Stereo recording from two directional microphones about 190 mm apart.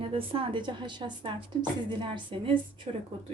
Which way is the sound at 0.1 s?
30° right (ahead or behind).